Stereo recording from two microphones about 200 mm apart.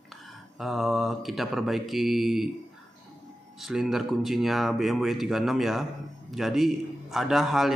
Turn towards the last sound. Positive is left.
turn(degrees=0)  # may be behind; listen again after turning